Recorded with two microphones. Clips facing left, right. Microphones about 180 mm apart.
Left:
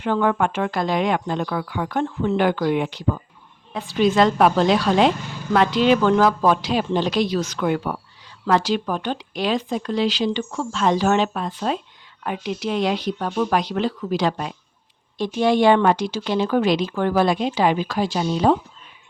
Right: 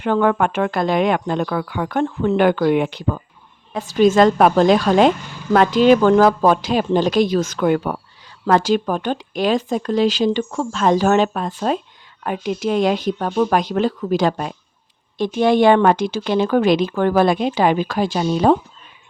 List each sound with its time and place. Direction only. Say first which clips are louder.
0.0 s speech: right 3 dB; 55° right (ahead or behind)
3.8 s a woman's voice: right 4 dB; 45° right (ahead or behind)